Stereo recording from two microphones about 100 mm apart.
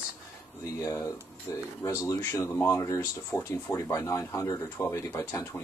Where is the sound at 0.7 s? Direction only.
30° left (ahead or behind).